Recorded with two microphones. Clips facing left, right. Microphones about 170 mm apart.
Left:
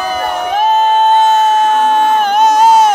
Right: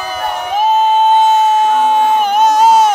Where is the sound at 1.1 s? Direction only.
10° right (ahead or behind).